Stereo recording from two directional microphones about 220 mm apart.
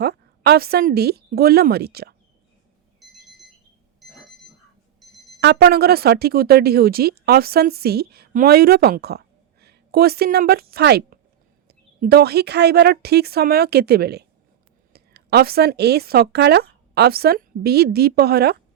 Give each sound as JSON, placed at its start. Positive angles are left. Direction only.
{"t": 0.0, "sound": "speech", "side_deg": -45}
{"t": 3.0, "sound": "alarm clock", "side_deg": 0}
{"t": 5.4, "sound": "speech", "side_deg": -50}